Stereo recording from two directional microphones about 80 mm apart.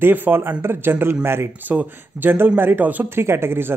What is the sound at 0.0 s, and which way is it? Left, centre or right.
A man's voice, right.